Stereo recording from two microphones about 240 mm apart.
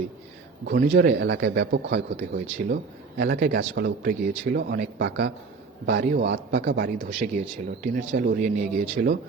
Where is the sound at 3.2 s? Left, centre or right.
Right.